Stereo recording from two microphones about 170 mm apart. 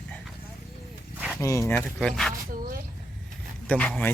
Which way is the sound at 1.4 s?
15° left (ahead or behind).